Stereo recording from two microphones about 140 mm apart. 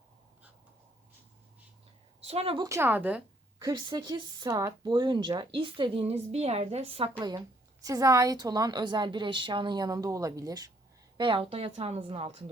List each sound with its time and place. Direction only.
2.2 s a woman's voice: 45° right (ahead or behind)
2.6 s speech: 20° right (ahead or behind)
3.6 s speech: 30° right (ahead or behind); by 7.1 s 45° right (ahead or behind)
7.3 s a woman's voice: 25° right (ahead or behind)
11.2 s a woman's voice: 40° right (ahead or behind)